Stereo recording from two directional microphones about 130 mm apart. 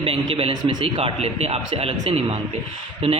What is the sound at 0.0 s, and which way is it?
A man's voice, 45° right (ahead or behind).